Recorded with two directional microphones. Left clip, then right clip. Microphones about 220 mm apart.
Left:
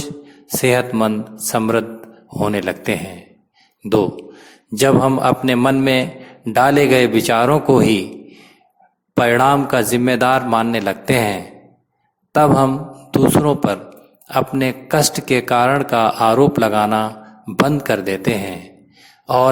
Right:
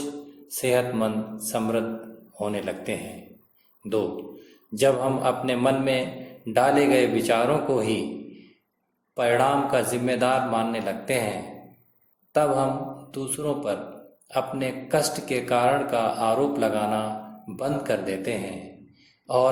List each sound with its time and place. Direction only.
0.4 s a man's voice: 45° left (ahead or behind)